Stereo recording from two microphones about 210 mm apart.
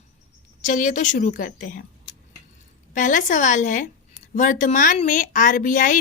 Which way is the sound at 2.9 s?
35° left (ahead or behind).